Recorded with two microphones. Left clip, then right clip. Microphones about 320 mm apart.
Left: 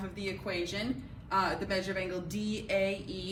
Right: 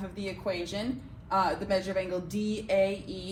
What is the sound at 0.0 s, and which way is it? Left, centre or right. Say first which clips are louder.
Speech: right 3 dB; centre.